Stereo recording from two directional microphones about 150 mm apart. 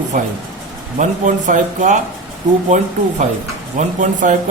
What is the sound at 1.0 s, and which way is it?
Speech, 60° right (ahead or behind).